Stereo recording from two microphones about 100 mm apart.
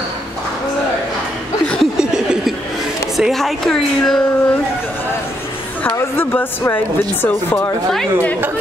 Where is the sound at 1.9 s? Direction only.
5° right (ahead or behind).